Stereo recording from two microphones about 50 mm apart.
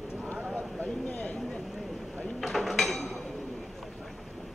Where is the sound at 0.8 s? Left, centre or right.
Left.